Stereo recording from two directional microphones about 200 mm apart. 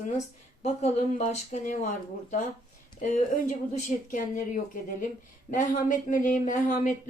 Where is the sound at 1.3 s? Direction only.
40° left (ahead or behind).